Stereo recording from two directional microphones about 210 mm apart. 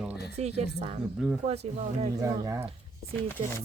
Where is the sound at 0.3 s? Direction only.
30° right (ahead or behind).